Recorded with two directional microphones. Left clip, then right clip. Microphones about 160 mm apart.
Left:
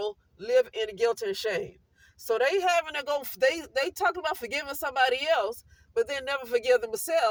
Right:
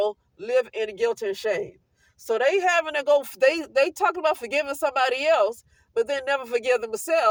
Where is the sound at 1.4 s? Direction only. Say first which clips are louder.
Right 5 dB; 25° right (ahead or behind).